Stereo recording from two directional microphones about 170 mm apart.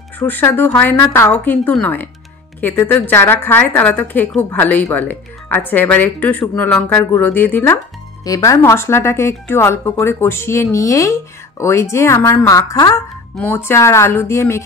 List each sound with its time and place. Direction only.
0.2 s a woman's voice: 15° left (ahead or behind)
8.2 s a woman's voice: 20° left (ahead or behind)